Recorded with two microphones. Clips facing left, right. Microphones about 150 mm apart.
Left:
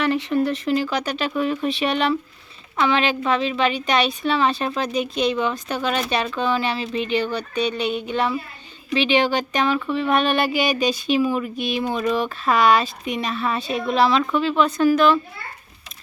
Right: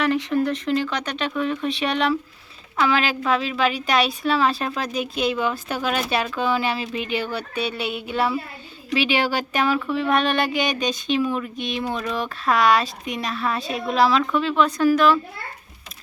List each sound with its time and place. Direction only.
0.0 s speech: centre (ahead or behind)